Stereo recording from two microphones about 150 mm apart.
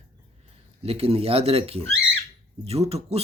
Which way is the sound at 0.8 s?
40° right (ahead or behind).